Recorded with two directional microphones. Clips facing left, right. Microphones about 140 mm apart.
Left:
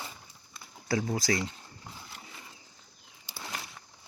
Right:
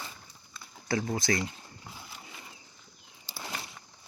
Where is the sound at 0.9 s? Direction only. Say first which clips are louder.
Even; 5° left (ahead or behind).